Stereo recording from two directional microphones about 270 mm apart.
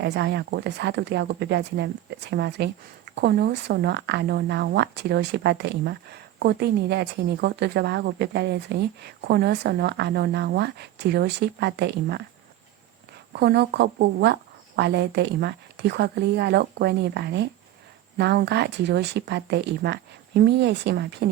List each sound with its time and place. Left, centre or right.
0.0 s speech: right
13.3 s speech: right